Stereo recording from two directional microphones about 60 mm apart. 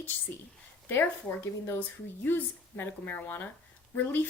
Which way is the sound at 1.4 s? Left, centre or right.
Left.